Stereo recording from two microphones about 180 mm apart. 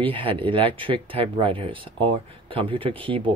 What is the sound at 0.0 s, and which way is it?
Speech, 30° right (ahead or behind).